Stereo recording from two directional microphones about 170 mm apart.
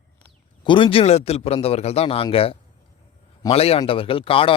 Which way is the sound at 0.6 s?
30° left (ahead or behind).